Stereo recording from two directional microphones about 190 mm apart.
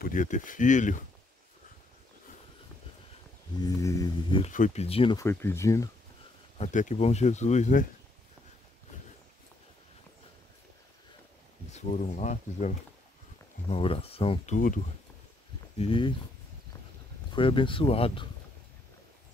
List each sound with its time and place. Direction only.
0.0 s speech: 45° left (ahead or behind)
3.6 s speech: 15° left (ahead or behind)
4.5 s speech: 40° left (ahead or behind)
5.1 s speech: 15° left (ahead or behind)
6.6 s speech: 40° left (ahead or behind)
11.7 s speech: 35° left (ahead or behind)
15.8 s speech: 25° left (ahead or behind)
17.4 s speech: 25° left (ahead or behind)